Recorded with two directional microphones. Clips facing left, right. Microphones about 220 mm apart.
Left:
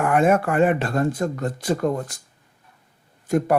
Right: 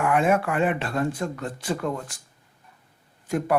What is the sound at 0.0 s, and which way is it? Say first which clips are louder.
Speech: left 3 dB; 45° left (ahead or behind).